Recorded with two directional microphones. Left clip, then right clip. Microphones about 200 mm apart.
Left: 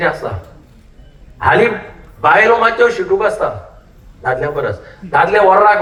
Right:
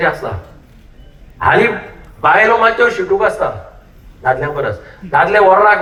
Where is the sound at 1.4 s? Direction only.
15° right (ahead or behind).